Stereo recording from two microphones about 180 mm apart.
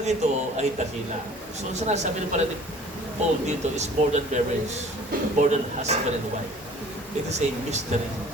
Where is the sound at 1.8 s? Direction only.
40° right (ahead or behind).